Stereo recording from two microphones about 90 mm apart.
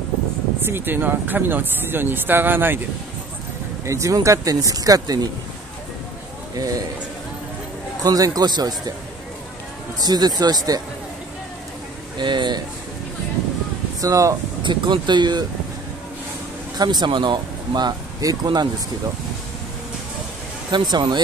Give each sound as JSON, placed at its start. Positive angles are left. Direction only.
{"t": 0.6, "sound": "speech", "side_deg": -25}
{"t": 3.8, "sound": "speech", "side_deg": -35}
{"t": 6.5, "sound": "speech", "side_deg": -40}
{"t": 8.0, "sound": "speech", "side_deg": -45}
{"t": 9.9, "sound": "speech", "side_deg": -50}
{"t": 12.2, "sound": "speech", "side_deg": -60}
{"t": 14.0, "sound": "speech", "side_deg": -35}
{"t": 14.6, "sound": "speech", "side_deg": -60}
{"t": 16.7, "sound": "speech", "side_deg": -50}
{"t": 20.7, "sound": "speech", "side_deg": -55}